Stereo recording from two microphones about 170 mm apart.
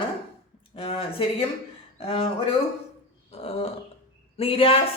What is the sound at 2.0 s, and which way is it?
Speech, 35° left (ahead or behind).